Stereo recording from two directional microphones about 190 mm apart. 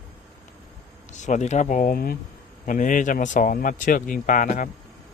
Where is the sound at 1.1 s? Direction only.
40° left (ahead or behind).